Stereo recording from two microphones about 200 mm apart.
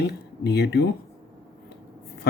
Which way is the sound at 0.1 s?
55° left (ahead or behind).